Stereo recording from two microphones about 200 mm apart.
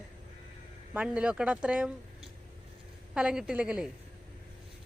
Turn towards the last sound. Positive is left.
turn(degrees=-5)  # may be behind; listen again after turning